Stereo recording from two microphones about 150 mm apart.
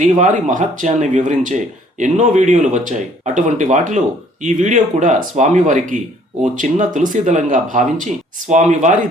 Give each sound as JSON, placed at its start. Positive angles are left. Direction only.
{"t": 0.0, "sound": "speech", "side_deg": -55}